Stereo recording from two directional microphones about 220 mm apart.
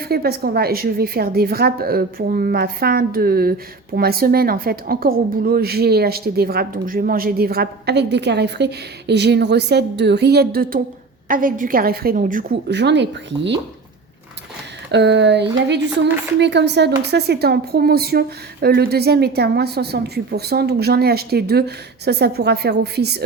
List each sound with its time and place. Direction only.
0.0 s a woman's voice: 45° right (ahead or behind)
14.8 s a woman's voice: 50° right (ahead or behind)